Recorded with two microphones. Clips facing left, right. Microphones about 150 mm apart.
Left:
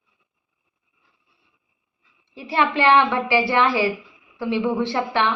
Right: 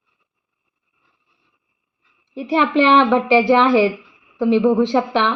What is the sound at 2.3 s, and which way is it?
A woman's voice, 20° right (ahead or behind).